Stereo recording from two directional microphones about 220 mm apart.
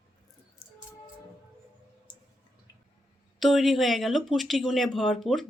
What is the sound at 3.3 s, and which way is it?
Speech, centre (ahead or behind).